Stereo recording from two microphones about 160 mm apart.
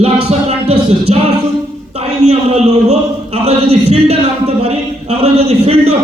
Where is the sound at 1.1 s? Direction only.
45° right (ahead or behind).